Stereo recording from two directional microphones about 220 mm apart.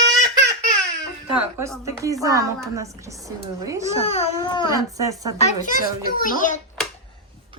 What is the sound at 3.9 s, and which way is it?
Speech, 25° left (ahead or behind).